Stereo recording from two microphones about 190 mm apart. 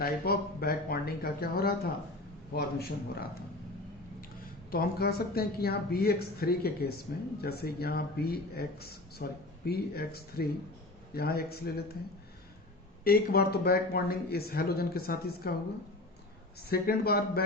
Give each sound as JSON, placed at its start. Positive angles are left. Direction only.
{"t": 0.0, "sound": "speech", "side_deg": 50}
{"t": 4.7, "sound": "speech", "side_deg": 50}
{"t": 13.1, "sound": "speech", "side_deg": 55}
{"t": 16.6, "sound": "speech", "side_deg": 55}